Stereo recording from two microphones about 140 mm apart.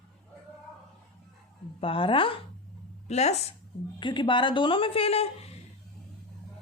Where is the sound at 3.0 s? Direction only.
50° left (ahead or behind).